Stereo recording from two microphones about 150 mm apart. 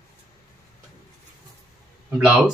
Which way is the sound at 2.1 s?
5° right (ahead or behind).